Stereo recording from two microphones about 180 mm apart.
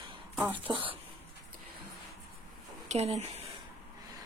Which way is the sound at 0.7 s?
30° right (ahead or behind).